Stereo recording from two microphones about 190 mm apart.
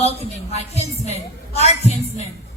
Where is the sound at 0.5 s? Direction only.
35° left (ahead or behind).